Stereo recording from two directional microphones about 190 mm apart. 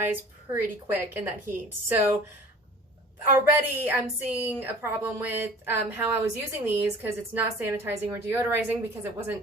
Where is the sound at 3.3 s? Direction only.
10° right (ahead or behind).